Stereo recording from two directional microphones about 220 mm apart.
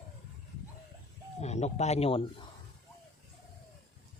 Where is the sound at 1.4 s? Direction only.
30° left (ahead or behind).